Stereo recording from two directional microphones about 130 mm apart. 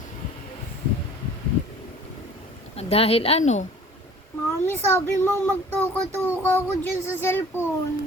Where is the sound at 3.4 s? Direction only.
65° left (ahead or behind).